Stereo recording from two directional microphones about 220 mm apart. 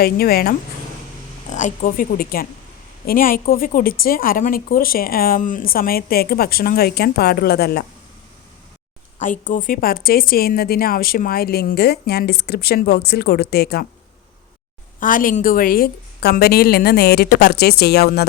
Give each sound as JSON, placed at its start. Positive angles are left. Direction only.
{"t": 0.0, "sound": "a woman's voice", "side_deg": 45}
{"t": 9.1, "sound": "a woman's voice", "side_deg": 35}
{"t": 15.0, "sound": "a woman's voice", "side_deg": 40}